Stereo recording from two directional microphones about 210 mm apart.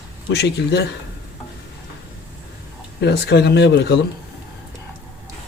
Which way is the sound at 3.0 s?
50° left (ahead or behind).